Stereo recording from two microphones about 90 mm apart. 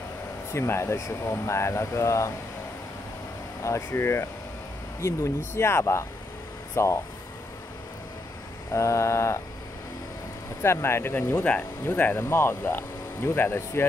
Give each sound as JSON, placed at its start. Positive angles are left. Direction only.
{"t": 0.5, "sound": "speech", "side_deg": 30}
{"t": 3.6, "sound": "speech", "side_deg": 30}
{"t": 8.7, "sound": "speech", "side_deg": 35}
{"t": 10.6, "sound": "speech", "side_deg": 30}